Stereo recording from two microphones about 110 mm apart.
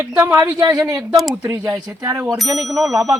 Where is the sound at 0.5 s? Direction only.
35° right (ahead or behind).